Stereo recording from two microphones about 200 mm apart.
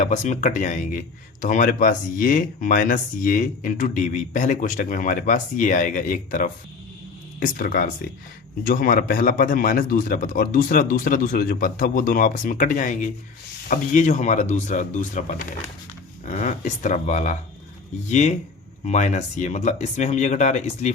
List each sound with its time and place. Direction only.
0.0 s a man's voice: 35° left (ahead or behind)